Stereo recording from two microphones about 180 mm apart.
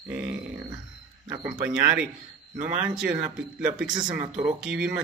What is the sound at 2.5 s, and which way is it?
Speech, 45° right (ahead or behind).